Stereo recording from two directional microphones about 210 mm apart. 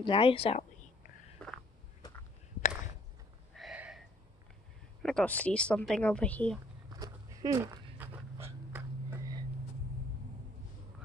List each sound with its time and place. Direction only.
0.0 s a woman's voice: 25° left (ahead or behind)
3.5 s a sound: 5° right (ahead or behind)
5.0 s speech: 5° left (ahead or behind)
7.0 s dog: 15° right (ahead or behind)